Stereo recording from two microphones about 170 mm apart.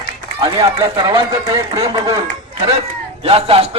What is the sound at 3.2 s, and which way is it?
Speech, 35° right (ahead or behind).